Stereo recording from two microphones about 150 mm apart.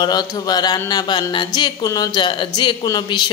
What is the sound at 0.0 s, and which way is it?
Speech, 25° left (ahead or behind).